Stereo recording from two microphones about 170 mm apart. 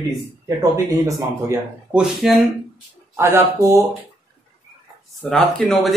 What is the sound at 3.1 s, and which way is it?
Speech, 15° right (ahead or behind).